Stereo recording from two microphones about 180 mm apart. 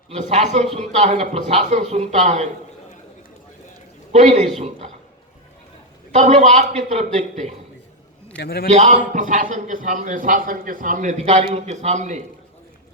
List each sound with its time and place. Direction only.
0.1 s a man's voice: 40° right (ahead or behind)
4.1 s a man's voice: 40° right (ahead or behind)
6.1 s a man's voice: 40° right (ahead or behind)
8.4 s a man's voice: 60° left (ahead or behind)
8.7 s a man's voice: 40° right (ahead or behind)